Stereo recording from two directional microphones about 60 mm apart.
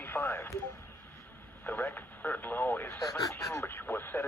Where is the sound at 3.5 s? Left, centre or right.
Left.